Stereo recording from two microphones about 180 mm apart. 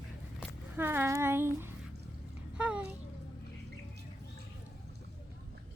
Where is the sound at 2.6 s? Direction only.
5° right (ahead or behind).